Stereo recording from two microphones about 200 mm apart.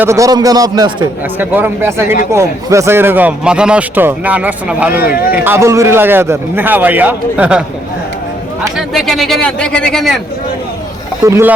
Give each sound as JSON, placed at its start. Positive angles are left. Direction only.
{"t": 0.0, "sound": "a man's voice", "side_deg": -15}
{"t": 1.4, "sound": "speech", "side_deg": -10}
{"t": 8.7, "sound": "speech", "side_deg": 0}
{"t": 11.3, "sound": "speech", "side_deg": -10}